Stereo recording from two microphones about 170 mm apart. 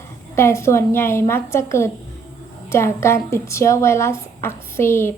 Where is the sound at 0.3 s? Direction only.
15° left (ahead or behind).